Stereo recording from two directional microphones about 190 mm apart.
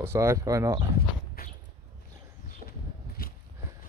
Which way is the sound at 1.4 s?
50° left (ahead or behind).